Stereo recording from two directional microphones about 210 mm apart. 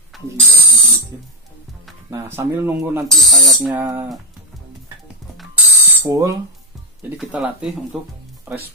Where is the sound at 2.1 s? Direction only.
10° right (ahead or behind).